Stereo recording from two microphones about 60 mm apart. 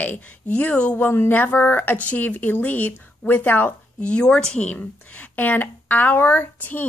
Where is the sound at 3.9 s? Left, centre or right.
Centre.